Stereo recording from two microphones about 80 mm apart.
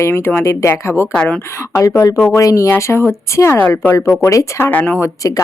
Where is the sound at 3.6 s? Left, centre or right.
Left.